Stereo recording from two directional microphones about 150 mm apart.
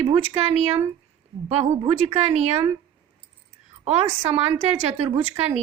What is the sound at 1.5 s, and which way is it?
A woman's voice, 40° right (ahead or behind).